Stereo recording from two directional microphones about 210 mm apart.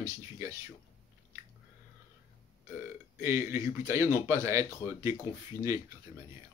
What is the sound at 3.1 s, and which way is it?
Speech, 15° right (ahead or behind).